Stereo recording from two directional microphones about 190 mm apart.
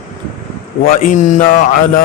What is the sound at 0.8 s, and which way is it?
Speech, 45° left (ahead or behind).